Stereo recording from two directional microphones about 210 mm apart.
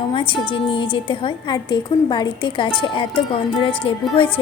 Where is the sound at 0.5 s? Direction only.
25° left (ahead or behind).